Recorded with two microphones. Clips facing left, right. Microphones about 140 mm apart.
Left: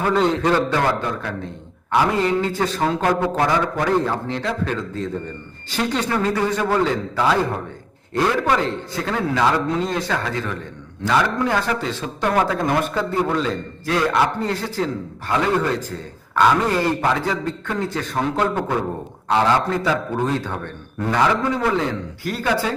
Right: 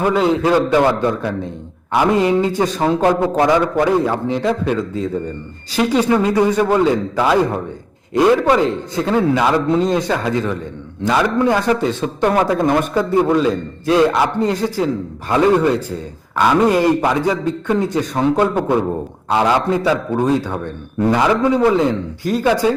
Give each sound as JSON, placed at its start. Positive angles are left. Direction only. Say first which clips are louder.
{"t": 0.1, "sound": "a man's voice", "louder": "right 2 dB", "side_deg": -5}
{"t": 0.7, "sound": "a man's voice", "louder": "right 6 dB", "side_deg": -20}
{"t": 3.8, "sound": "a man's voice", "louder": "right 5 dB", "side_deg": -10}
{"t": 13.8, "sound": "a man's voice", "louder": "right 5 dB", "side_deg": -20}